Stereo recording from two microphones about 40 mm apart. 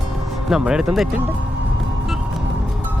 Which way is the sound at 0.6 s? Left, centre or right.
Centre.